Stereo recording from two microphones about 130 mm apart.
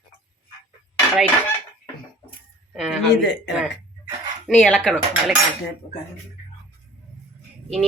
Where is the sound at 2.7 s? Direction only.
Centre (ahead or behind).